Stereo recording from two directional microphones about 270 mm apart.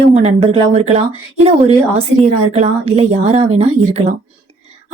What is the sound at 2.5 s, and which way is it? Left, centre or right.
A woman's voice, right.